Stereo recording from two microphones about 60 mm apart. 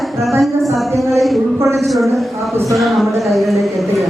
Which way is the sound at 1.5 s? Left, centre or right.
Right.